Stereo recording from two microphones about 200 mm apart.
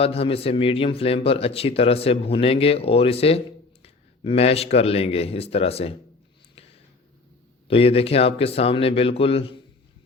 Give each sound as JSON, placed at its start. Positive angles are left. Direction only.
{"t": 0.0, "sound": "a man's voice", "side_deg": 30}
{"t": 6.6, "sound": "a sound", "side_deg": 30}
{"t": 7.7, "sound": "a man's voice", "side_deg": 30}